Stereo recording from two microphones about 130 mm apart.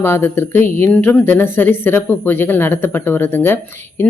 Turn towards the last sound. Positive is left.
turn(degrees=15)  # may be behind; listen again after turning